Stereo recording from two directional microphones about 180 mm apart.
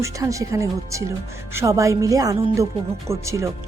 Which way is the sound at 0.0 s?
15° right (ahead or behind).